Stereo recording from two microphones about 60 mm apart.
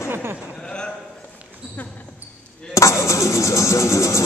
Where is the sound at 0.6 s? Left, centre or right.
Centre.